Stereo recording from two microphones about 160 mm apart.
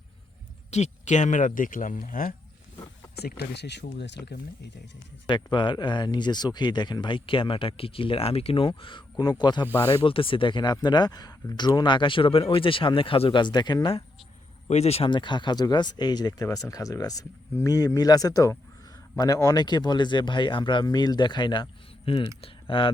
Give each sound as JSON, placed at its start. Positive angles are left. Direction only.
{"t": 0.7, "sound": "speech", "side_deg": 45}
{"t": 3.2, "sound": "speech", "side_deg": 85}
{"t": 5.3, "sound": "speech", "side_deg": 30}
{"t": 14.7, "sound": "speech", "side_deg": 40}